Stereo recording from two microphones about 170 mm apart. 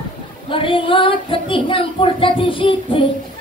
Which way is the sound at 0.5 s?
30° left (ahead or behind).